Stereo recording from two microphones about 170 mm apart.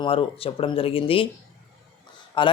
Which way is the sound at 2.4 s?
30° left (ahead or behind).